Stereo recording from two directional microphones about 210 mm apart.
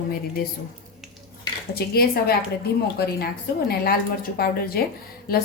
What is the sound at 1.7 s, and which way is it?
Speech, 50° left (ahead or behind).